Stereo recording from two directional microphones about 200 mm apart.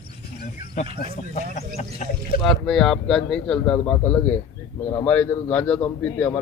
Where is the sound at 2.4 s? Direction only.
Centre (ahead or behind).